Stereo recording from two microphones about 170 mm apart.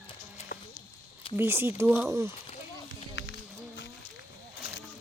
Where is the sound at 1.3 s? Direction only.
15° right (ahead or behind).